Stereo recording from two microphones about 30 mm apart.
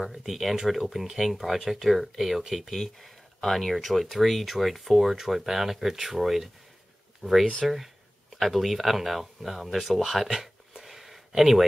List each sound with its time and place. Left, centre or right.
0.0 s speech: centre
2.6 s speech: centre
7.2 s speech: left
7.6 s speech: centre
10.8 s a sound: centre